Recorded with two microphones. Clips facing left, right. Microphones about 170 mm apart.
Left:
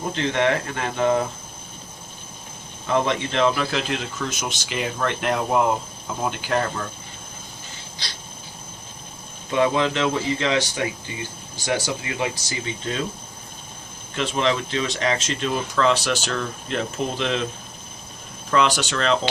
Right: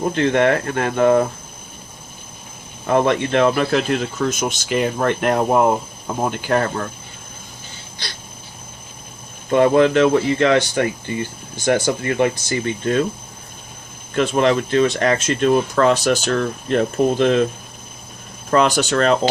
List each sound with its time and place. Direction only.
0.1 s speech: 55° right (ahead or behind)
2.8 s speech: 55° right (ahead or behind)
9.5 s speech: 50° right (ahead or behind)
14.2 s speech: 50° right (ahead or behind)
18.5 s speech: 45° right (ahead or behind)